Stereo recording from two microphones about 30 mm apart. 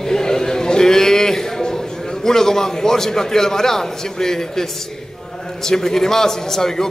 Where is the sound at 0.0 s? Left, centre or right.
Centre.